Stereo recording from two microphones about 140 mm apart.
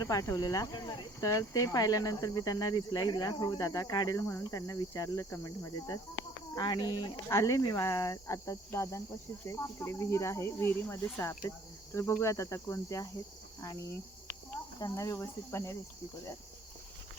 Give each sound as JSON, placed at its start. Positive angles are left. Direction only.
{"t": 0.0, "sound": "speech", "side_deg": 25}
{"t": 7.3, "sound": "speech", "side_deg": 20}
{"t": 14.8, "sound": "speech", "side_deg": 25}